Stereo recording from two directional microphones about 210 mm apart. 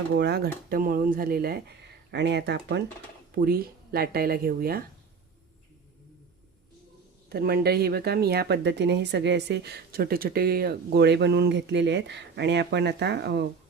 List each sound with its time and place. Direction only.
0.2 s a woman's voice: 50° right (ahead or behind)
7.3 s a woman's voice: 50° right (ahead or behind)